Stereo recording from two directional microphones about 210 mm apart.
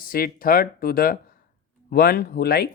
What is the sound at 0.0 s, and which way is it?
Speech, 45° left (ahead or behind).